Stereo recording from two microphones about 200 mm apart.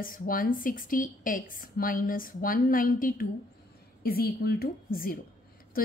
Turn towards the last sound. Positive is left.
turn(degrees=45)  # may be behind; listen again after turning